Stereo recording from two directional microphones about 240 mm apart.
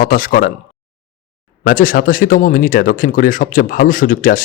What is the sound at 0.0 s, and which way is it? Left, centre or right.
Speech, left.